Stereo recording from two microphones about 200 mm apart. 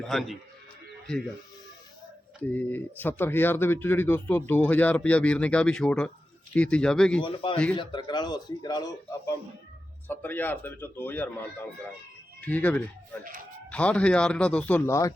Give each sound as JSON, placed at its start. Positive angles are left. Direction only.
{"t": 0.0, "sound": "speech", "side_deg": 0}
{"t": 2.4, "sound": "speech", "side_deg": 10}
{"t": 7.2, "sound": "a man's voice", "side_deg": 25}